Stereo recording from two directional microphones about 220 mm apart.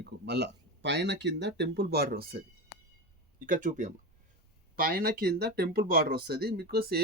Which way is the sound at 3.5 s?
35° right (ahead or behind).